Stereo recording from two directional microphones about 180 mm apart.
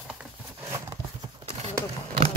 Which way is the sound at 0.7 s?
20° right (ahead or behind).